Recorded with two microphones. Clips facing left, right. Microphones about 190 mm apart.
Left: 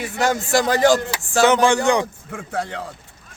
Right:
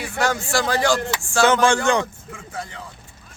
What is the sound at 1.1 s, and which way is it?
Speech, 15° left (ahead or behind).